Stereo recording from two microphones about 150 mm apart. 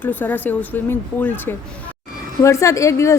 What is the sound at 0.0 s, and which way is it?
Speech, 10° left (ahead or behind).